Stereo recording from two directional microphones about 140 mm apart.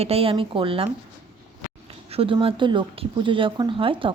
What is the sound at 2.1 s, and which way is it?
Speech, 40° right (ahead or behind).